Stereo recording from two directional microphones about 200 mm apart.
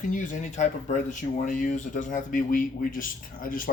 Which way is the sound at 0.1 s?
40° left (ahead or behind).